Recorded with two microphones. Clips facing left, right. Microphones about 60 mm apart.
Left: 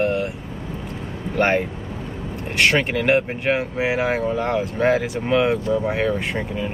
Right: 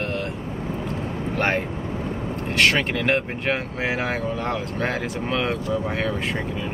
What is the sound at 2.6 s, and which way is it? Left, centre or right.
Speech, centre.